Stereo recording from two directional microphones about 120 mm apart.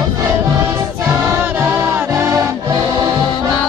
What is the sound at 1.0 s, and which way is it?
Music, 20° right (ahead or behind).